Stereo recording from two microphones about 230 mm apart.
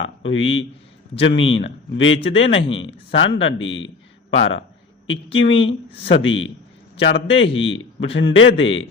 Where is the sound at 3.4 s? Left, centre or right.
Left.